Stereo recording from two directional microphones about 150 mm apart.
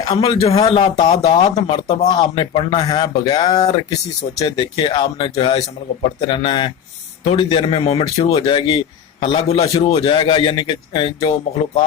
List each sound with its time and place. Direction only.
0.0 s a man's voice: 35° left (ahead or behind)
2.9 s a man's voice: 30° left (ahead or behind)